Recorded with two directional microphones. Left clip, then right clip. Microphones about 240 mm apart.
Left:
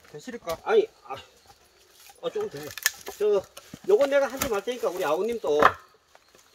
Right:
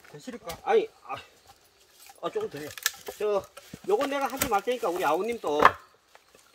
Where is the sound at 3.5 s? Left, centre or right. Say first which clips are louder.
Left 5 dB; centre.